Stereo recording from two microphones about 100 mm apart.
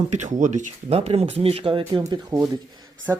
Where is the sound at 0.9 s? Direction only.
85° right; by 2.0 s 55° right (ahead or behind).